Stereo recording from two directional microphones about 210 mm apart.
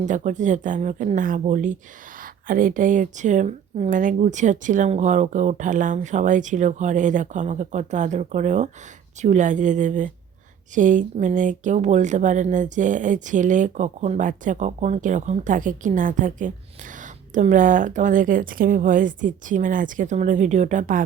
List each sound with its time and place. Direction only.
0.0 s speech: 35° right (ahead or behind)